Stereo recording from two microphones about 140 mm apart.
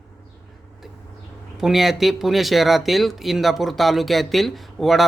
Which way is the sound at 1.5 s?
Centre (ahead or behind).